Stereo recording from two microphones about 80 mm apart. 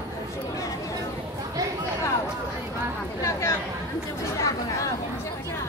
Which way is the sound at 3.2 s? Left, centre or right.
Left.